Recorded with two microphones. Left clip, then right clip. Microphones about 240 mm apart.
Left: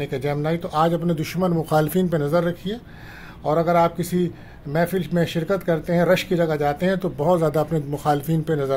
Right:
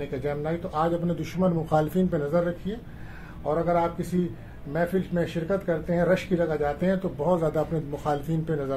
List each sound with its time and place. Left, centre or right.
0.0 s speech: left